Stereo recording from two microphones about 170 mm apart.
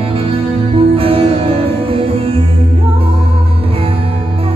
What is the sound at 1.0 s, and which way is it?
Music, 35° right (ahead or behind).